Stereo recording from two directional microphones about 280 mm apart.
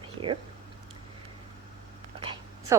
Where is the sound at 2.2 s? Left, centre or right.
Centre.